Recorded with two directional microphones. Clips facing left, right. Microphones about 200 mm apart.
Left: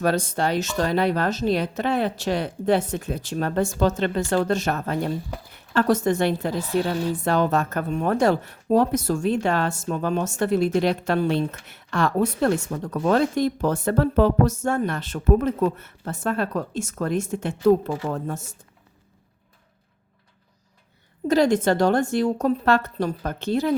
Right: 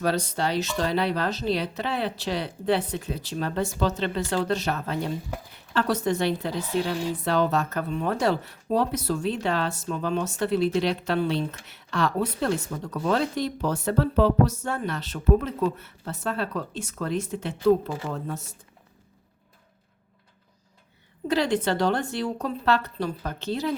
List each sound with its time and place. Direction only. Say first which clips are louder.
0.0 s speech: left 3 dB; 50° left (ahead or behind)
21.2 s speech: left 5 dB; 45° left (ahead or behind)